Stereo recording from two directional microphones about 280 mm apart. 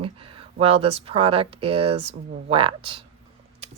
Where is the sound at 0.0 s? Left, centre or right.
Centre.